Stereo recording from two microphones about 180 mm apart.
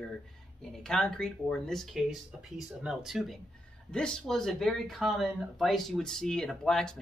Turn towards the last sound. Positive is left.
turn(degrees=5)  # may be behind; listen again after turning